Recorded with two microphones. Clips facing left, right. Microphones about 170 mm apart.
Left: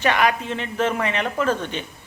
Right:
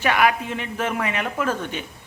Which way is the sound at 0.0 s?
10° right (ahead or behind).